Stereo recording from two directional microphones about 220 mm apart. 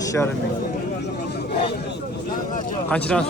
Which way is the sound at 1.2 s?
45° left (ahead or behind).